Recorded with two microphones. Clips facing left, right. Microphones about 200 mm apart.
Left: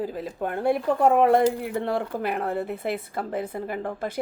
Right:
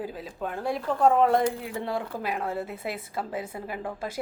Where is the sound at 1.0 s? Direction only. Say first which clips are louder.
Left 1 dB; 10° left (ahead or behind).